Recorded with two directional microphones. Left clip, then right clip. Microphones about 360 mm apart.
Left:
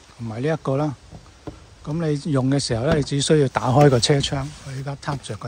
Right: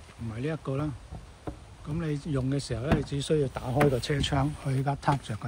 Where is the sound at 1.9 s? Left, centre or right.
Centre.